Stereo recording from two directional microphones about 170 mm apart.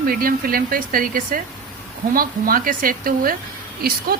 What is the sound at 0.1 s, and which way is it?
A woman's voice, 60° right (ahead or behind).